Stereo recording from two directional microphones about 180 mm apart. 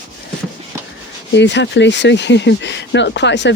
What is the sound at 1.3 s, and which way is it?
Speech, 75° left (ahead or behind).